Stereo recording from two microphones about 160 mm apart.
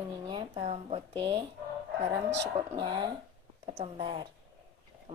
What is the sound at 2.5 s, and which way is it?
A woman's voice, 30° right (ahead or behind).